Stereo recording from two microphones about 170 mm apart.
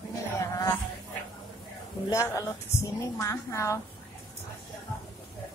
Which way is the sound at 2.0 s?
20° left (ahead or behind).